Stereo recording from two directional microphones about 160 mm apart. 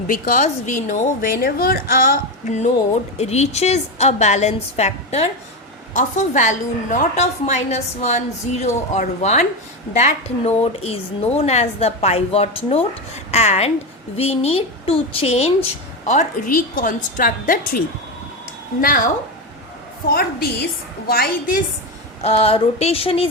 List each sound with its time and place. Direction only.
0.1 s a woman's voice: 55° left (ahead or behind)
3.2 s a woman's voice: 40° left (ahead or behind)
5.9 s a woman's voice: 50° left (ahead or behind)
16.0 s a woman's voice: 55° left (ahead or behind)
18.8 s a woman's voice: 60° left (ahead or behind)
20.1 s a woman's voice: 75° left (ahead or behind)
22.2 s speech: 40° left (ahead or behind)